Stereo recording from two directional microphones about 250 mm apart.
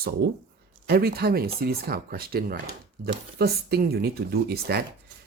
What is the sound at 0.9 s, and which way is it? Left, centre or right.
Speech, right.